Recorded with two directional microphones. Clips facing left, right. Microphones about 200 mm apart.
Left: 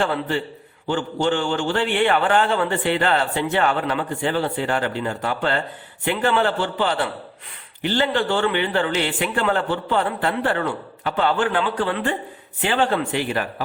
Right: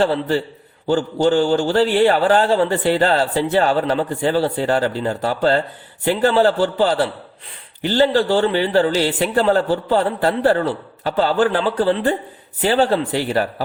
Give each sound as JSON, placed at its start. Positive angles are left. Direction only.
{"t": 0.0, "sound": "a man's voice", "side_deg": -35}